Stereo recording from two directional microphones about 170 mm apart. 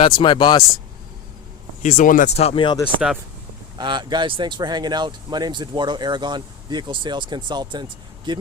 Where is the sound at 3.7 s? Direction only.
25° right (ahead or behind).